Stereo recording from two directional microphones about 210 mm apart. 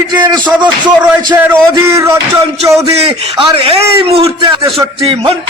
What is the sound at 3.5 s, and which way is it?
A man's voice, 25° right (ahead or behind).